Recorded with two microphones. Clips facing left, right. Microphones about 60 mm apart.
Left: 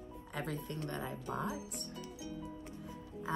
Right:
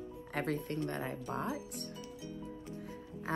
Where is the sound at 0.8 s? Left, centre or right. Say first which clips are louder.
Right 3 dB; right.